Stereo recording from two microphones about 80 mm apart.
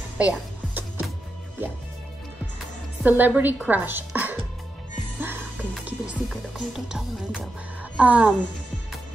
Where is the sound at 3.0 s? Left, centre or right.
Right.